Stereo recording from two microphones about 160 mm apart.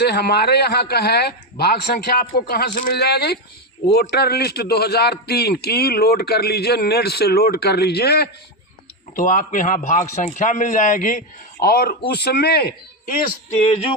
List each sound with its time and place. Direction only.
0.0 s a man's voice: 90° left
9.1 s speech: 55° left (ahead or behind)
11.6 s speech: 75° left (ahead or behind)
13.6 s music: 35° left (ahead or behind)